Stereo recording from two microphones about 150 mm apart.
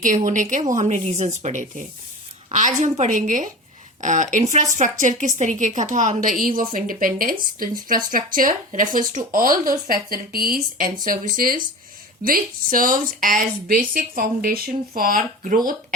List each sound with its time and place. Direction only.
0.0 s a woman's voice: 60° right (ahead or behind)